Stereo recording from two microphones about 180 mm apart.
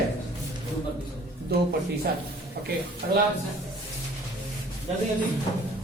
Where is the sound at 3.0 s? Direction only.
55° right (ahead or behind).